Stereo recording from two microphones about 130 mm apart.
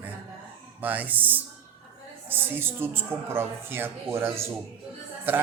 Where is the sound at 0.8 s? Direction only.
15° right (ahead or behind).